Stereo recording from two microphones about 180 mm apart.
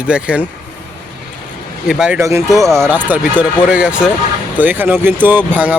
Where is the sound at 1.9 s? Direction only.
5° right (ahead or behind).